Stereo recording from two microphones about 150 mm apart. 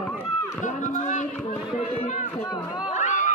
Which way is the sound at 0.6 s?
55° left (ahead or behind).